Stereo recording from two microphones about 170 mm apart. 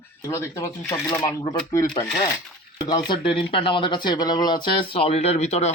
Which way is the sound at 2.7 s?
25° left (ahead or behind).